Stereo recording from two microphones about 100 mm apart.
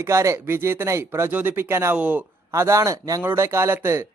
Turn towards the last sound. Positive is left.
turn(degrees=-25)  # may be behind; listen again after turning